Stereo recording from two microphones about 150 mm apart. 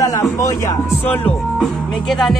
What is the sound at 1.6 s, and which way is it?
Speech, centre (ahead or behind).